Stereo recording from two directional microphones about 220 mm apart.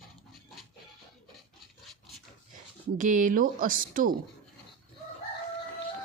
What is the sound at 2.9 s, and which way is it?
A woman's voice, 35° right (ahead or behind).